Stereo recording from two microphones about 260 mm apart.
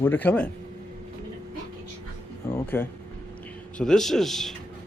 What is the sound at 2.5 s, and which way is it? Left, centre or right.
Speech, centre.